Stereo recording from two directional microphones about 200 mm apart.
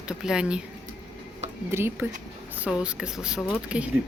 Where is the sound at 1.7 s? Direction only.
10° right (ahead or behind).